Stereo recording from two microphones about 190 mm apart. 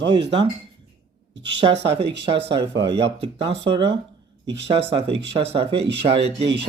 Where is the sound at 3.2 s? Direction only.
30° right (ahead or behind).